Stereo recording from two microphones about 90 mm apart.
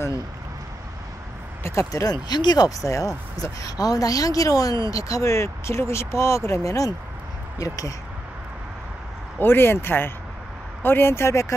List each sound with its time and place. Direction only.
1.6 s speech: 35° left (ahead or behind)
9.4 s speech: 25° left (ahead or behind)